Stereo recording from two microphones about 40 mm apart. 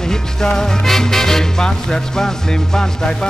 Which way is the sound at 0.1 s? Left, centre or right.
Centre.